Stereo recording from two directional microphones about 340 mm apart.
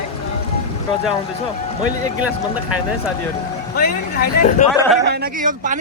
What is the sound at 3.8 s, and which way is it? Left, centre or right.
Speech, left.